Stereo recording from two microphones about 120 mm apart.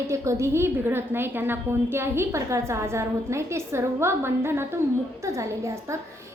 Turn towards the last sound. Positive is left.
turn(degrees=-25)  # may be behind; listen again after turning